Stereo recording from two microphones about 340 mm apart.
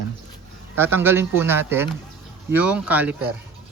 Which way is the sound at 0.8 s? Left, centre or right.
Centre.